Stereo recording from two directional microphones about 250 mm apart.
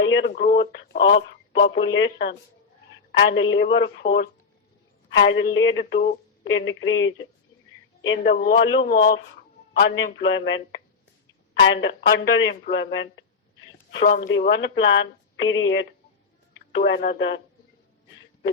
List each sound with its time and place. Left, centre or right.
0.0 s a woman's voice: left
5.1 s a woman's voice: left
11.8 s a woman's voice: left